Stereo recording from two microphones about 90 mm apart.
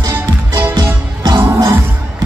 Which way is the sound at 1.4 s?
30° right (ahead or behind).